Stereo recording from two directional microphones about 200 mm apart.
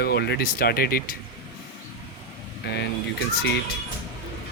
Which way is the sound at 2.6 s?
55° left (ahead or behind).